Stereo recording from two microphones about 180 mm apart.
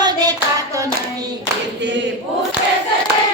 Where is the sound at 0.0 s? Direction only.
20° right (ahead or behind).